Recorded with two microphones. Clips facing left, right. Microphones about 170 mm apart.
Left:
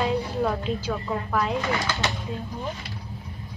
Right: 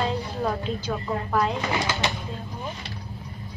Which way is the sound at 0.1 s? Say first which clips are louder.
Left 2 dB; centre (ahead or behind).